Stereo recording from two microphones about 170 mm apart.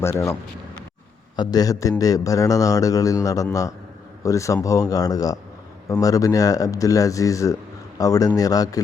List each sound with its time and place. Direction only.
0.0 s a man's voice: 15° left (ahead or behind)
1.4 s a man's voice: 20° left (ahead or behind)